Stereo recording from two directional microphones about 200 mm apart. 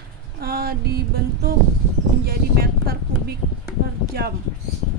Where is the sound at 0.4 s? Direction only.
50° right (ahead or behind).